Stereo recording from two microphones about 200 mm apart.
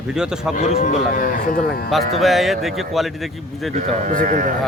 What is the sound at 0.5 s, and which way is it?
Speech, 35° left (ahead or behind).